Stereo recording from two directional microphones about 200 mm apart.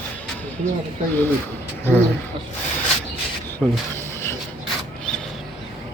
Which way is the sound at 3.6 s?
5° left (ahead or behind).